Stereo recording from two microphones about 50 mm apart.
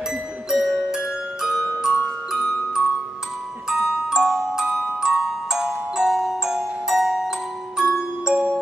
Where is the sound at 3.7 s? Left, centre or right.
Centre.